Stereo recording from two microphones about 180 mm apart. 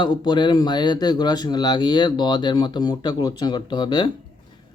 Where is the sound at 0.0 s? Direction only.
25° left (ahead or behind).